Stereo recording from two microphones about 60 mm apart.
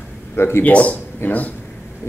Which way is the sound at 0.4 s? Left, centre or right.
Left.